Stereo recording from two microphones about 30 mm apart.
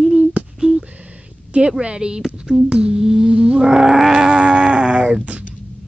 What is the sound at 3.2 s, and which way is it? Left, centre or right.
Whale vocalization, right.